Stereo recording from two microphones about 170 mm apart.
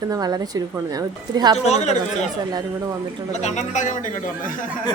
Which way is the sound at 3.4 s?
45° left (ahead or behind).